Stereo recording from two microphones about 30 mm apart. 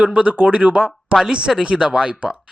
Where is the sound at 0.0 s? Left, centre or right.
Right.